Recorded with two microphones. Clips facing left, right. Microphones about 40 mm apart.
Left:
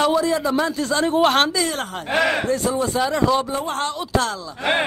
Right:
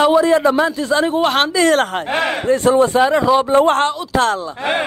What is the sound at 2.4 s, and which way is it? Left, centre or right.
A man's voice, right.